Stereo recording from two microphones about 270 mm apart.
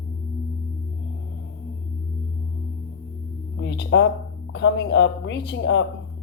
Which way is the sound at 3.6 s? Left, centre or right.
Left.